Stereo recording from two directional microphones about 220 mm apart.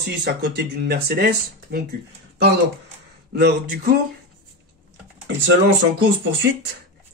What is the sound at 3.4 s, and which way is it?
Speech, 45° right (ahead or behind).